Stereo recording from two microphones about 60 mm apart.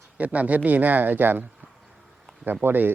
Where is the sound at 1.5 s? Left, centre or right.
Centre.